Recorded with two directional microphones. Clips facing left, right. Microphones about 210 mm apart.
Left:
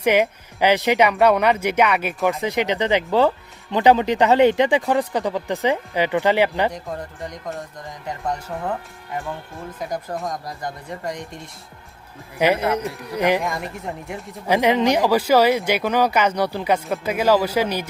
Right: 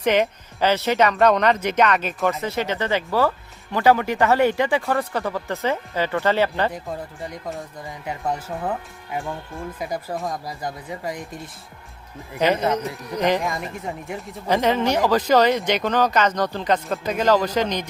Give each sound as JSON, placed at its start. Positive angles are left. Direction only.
{"t": 0.0, "sound": "speech", "side_deg": 10}
{"t": 8.0, "sound": "speech", "side_deg": -5}
{"t": 9.9, "sound": "speech", "side_deg": -5}
{"t": 12.4, "sound": "speech", "side_deg": 10}
{"t": 13.4, "sound": "speech", "side_deg": 0}
{"t": 14.4, "sound": "speech", "side_deg": 15}